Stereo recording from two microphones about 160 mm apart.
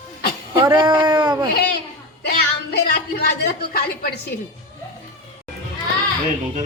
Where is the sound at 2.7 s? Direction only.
75° left (ahead or behind).